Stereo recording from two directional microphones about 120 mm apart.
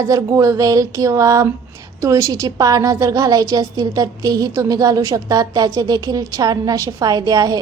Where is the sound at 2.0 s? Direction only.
25° right (ahead or behind).